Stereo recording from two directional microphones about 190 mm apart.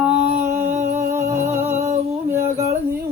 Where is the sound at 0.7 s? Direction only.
40° right (ahead or behind).